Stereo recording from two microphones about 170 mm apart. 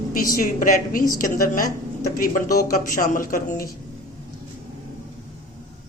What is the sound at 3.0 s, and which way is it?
Speech, 55° left (ahead or behind).